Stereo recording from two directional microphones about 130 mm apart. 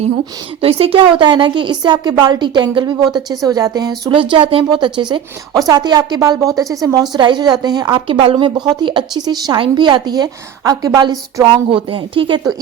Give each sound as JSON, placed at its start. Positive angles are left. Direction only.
{"t": 0.6, "sound": "a woman's voice", "side_deg": -45}
{"t": 4.1, "sound": "a woman's voice", "side_deg": -40}
{"t": 11.7, "sound": "a woman's voice", "side_deg": -40}